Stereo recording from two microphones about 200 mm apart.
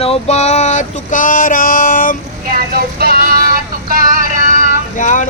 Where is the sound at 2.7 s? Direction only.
50° right (ahead or behind).